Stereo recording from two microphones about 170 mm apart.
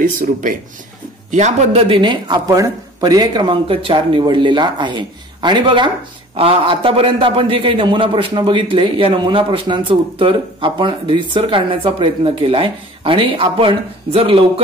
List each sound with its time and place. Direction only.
0.0 s speech: 50° right (ahead or behind)
1.3 s a man's voice: 40° right (ahead or behind)